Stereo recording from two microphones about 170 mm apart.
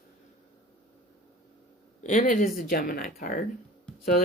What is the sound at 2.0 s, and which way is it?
Speech, 50° left (ahead or behind).